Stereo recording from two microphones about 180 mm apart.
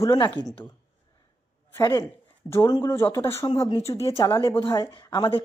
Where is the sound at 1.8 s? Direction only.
20° left (ahead or behind).